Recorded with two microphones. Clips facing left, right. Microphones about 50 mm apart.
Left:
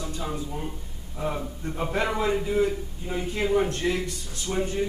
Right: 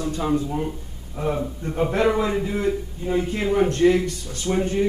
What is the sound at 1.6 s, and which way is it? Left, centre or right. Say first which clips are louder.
Speech: right 7 dB; centre.